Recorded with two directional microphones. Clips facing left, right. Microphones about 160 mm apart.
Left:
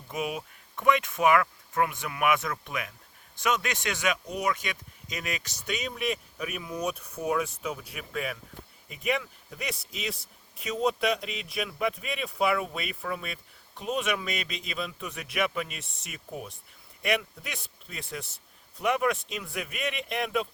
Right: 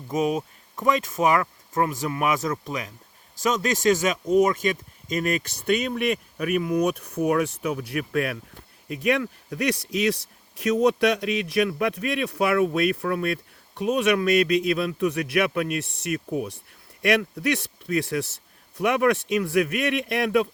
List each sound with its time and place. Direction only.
0.1 s speech: 40° right (ahead or behind); by 8.4 s 70° right (ahead or behind)
9.0 s a man's voice: 80° right
18.8 s speech: 70° right (ahead or behind)